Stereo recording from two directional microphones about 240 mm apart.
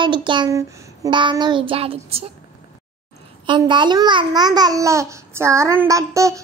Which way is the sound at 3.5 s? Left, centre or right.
Centre.